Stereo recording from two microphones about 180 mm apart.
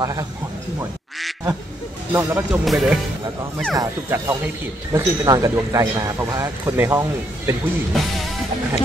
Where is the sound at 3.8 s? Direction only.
20° right (ahead or behind).